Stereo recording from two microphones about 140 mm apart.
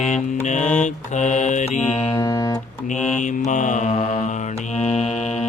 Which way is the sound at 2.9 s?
60° left (ahead or behind).